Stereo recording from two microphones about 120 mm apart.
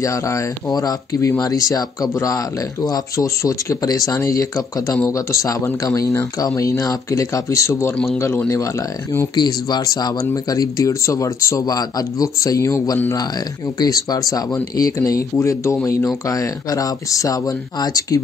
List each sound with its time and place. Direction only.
0.0 s speech: 25° left (ahead or behind)
9.3 s speech: 35° left (ahead or behind)